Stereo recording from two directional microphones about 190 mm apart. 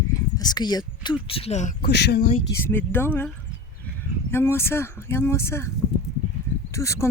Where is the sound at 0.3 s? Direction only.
20° left (ahead or behind).